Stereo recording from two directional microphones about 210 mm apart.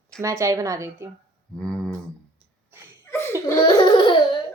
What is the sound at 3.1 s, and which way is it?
Laughter, 10° left (ahead or behind).